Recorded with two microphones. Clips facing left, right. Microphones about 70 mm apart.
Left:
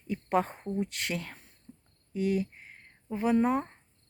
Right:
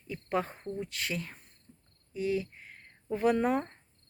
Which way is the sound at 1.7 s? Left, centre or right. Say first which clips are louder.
Left 8 dB; left.